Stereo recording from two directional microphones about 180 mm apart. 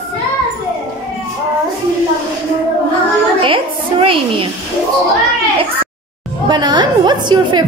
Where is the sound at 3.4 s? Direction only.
30° right (ahead or behind).